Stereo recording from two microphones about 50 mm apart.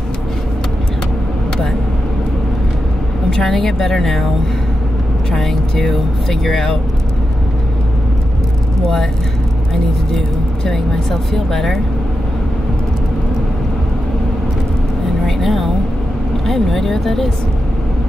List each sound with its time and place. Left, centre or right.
3.3 s a woman's voice: centre
5.3 s speech: centre
10.1 s speech: centre
15.2 s vehicle: centre
16.4 s a woman's voice: centre